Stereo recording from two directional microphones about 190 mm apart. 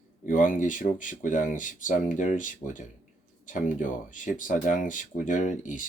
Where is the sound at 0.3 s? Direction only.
45° left (ahead or behind).